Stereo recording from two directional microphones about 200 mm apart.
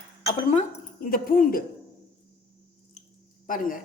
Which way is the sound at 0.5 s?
45° left (ahead or behind).